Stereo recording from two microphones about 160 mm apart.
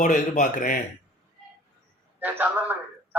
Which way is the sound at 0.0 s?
50° left (ahead or behind).